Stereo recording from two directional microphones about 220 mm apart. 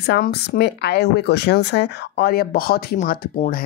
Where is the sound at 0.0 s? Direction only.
50° left (ahead or behind).